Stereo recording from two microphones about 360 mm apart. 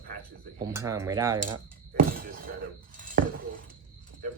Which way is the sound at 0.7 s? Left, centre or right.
Centre.